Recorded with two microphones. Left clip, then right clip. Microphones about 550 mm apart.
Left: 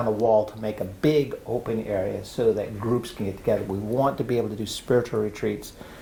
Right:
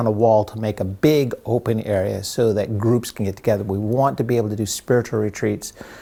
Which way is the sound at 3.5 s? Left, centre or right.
Right.